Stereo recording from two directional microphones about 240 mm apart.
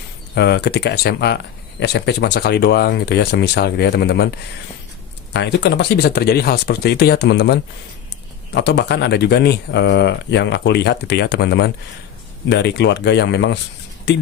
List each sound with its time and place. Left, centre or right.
0.3 s speech: left
5.3 s speech: left